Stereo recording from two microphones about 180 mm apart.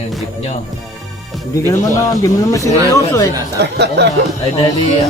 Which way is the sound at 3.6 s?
70° right (ahead or behind).